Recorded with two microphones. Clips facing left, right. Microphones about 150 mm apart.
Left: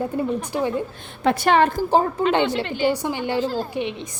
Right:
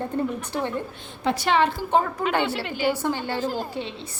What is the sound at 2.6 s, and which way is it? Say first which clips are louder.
Speech: left 4 dB; 10° right (ahead or behind).